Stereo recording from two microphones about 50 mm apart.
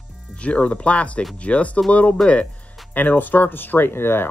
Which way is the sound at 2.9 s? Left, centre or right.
Left.